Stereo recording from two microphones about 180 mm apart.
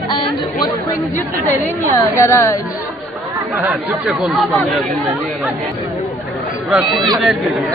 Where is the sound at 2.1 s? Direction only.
15° left (ahead or behind).